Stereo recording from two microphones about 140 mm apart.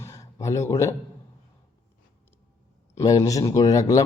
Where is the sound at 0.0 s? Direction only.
20° left (ahead or behind).